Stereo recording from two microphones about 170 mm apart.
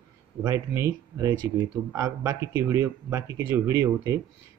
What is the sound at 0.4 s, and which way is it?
A man's voice, 20° right (ahead or behind).